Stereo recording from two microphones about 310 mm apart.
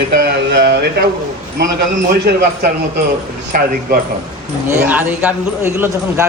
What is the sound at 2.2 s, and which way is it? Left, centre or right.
A man's voice, right.